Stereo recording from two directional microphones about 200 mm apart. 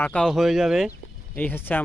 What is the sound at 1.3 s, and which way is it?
Speech, 10° left (ahead or behind).